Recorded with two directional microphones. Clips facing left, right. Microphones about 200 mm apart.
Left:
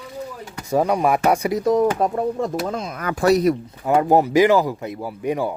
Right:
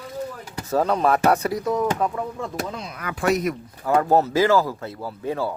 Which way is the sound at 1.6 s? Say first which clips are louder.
Left 8 dB; 35° left (ahead or behind).